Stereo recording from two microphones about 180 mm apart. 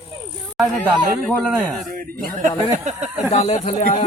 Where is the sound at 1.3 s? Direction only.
5° left (ahead or behind).